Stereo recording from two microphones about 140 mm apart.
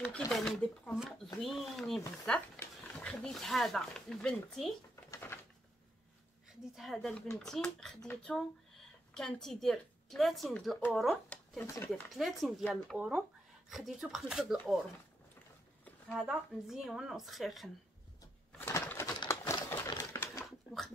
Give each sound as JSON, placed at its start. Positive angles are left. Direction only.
{"t": 0.0, "sound": "speech", "side_deg": 5}
{"t": 5.1, "sound": "a sound", "side_deg": 15}
{"t": 6.6, "sound": "speech", "side_deg": 0}
{"t": 16.1, "sound": "speech", "side_deg": -5}
{"t": 18.6, "sound": "bird", "side_deg": 20}
{"t": 19.1, "sound": "typewriter", "side_deg": 25}